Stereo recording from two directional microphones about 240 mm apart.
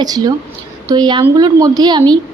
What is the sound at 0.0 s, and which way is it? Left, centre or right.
A woman's voice, centre.